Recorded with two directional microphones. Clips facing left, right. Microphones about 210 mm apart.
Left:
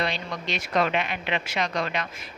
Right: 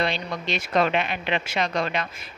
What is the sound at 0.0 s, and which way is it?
Speech, 30° right (ahead or behind).